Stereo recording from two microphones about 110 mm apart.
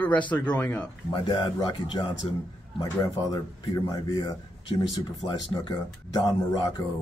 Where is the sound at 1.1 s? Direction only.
45° left (ahead or behind).